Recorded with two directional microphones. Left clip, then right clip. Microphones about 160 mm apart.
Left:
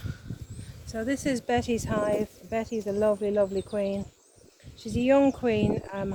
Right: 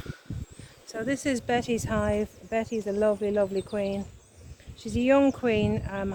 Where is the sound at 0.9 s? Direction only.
20° right (ahead or behind).